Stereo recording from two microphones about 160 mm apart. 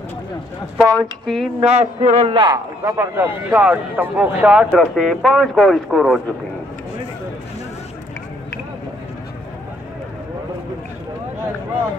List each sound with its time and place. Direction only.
0.7 s speech: centre (ahead or behind)
1.8 s speech: 45° right (ahead or behind)
2.3 s speech: 25° right (ahead or behind); by 6.2 s centre (ahead or behind)